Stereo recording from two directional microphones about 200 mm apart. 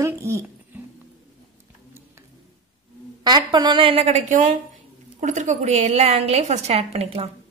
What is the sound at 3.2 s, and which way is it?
A woman's voice, 20° right (ahead or behind).